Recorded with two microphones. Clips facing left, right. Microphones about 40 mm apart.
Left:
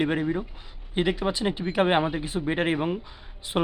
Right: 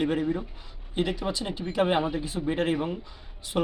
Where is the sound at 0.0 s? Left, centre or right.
Centre.